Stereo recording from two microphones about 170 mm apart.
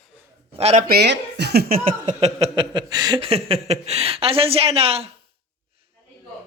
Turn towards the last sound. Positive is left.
turn(degrees=-35)  # may be behind; listen again after turning